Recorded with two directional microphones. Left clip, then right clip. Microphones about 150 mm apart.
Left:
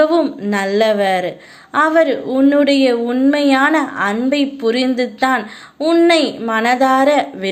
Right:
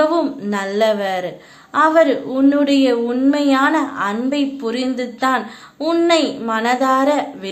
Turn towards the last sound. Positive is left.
turn(degrees=25)  # may be behind; listen again after turning